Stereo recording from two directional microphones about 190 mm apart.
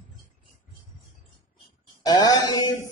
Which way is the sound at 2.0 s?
20° left (ahead or behind).